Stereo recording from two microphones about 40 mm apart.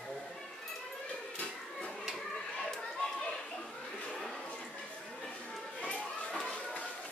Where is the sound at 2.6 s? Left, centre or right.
Centre.